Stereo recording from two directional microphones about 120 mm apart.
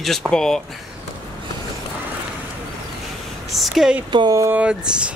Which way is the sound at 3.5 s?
Centre (ahead or behind).